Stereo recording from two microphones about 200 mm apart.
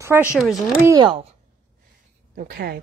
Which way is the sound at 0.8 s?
20° right (ahead or behind).